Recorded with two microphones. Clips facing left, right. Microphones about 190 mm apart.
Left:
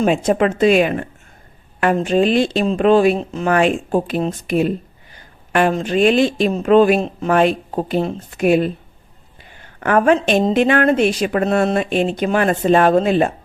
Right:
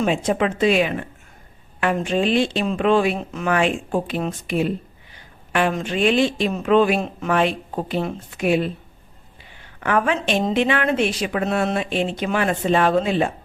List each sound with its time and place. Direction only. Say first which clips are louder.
0.0 s a woman's voice: left 5 dB; 45° left (ahead or behind)